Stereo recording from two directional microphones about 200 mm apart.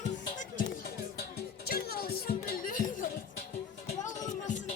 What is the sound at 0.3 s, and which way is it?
Music, 40° left (ahead or behind).